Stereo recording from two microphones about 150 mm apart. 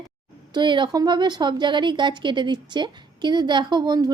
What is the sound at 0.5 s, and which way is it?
A woman's voice, 30° right (ahead or behind).